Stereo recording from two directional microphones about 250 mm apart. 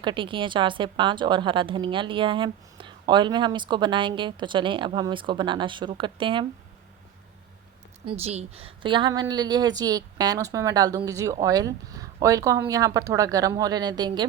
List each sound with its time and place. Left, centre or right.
0.0 s a woman's voice: centre
8.0 s a woman's voice: right